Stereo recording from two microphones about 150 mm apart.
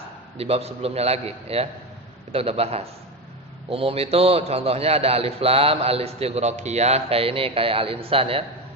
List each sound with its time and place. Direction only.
0.3 s a man's voice: 40° right (ahead or behind)